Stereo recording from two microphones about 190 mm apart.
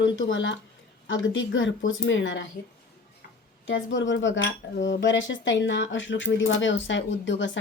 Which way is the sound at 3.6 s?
75° left (ahead or behind).